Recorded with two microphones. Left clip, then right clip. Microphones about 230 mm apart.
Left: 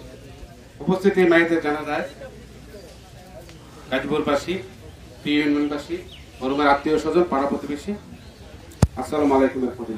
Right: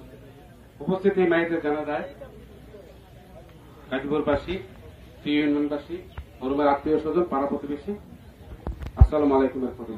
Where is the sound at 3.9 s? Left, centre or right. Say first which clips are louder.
Left 3 dB; centre.